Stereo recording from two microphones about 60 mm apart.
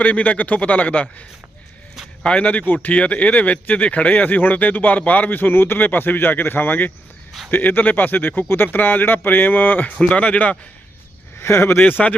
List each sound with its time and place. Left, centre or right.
0.0 s speech: left
2.2 s speech: centre
10.0 s speech: left
11.3 s speech: left
11.9 s speech: left